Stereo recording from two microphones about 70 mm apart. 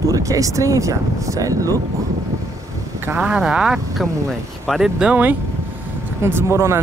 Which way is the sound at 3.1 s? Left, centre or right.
Centre.